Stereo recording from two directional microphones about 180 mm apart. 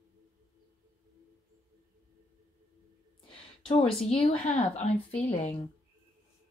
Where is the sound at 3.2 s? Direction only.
30° left (ahead or behind).